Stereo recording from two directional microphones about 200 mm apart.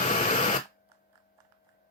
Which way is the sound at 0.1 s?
35° left (ahead or behind).